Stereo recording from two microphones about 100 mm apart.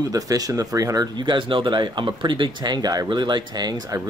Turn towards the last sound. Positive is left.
turn(degrees=-40)  # may be behind; listen again after turning